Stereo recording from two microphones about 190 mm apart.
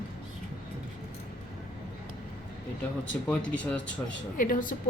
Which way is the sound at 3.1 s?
10° left (ahead or behind).